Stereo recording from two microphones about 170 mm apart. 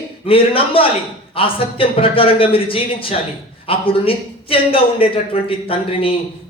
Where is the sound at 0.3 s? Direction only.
30° left (ahead or behind).